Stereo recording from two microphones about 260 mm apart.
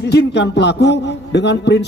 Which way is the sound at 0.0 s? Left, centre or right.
Left.